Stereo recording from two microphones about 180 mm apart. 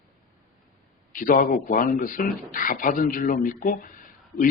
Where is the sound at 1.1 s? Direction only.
50° left (ahead or behind).